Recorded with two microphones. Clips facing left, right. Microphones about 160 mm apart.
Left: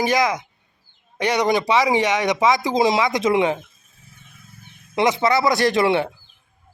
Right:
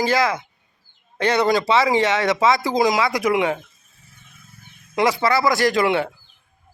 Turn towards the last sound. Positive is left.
turn(degrees=20)  # may be behind; listen again after turning